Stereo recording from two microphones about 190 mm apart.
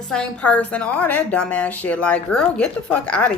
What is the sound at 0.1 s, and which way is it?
A woman's voice, 5° left (ahead or behind).